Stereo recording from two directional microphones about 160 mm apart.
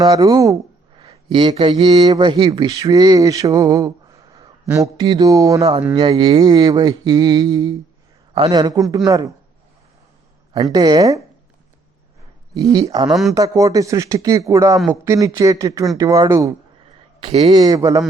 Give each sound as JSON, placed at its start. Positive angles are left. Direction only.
{"t": 0.0, "sound": "mantra", "side_deg": -25}
{"t": 0.9, "sound": "a man's voice", "side_deg": -30}
{"t": 4.9, "sound": "mantra", "side_deg": -25}
{"t": 10.5, "sound": "mantra", "side_deg": -25}
{"t": 12.5, "sound": "mantra", "side_deg": -20}
{"t": 17.2, "sound": "speech", "side_deg": -40}
{"t": 17.5, "sound": "mantra", "side_deg": -25}